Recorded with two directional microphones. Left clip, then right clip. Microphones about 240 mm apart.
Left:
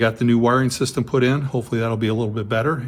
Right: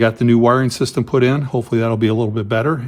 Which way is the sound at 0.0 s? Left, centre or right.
Right.